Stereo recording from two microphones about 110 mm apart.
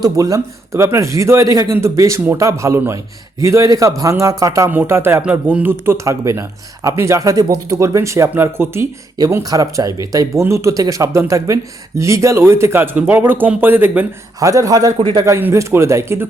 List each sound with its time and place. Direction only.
0.0 s speech: 30° right (ahead or behind)
14.3 s speech: 30° right (ahead or behind)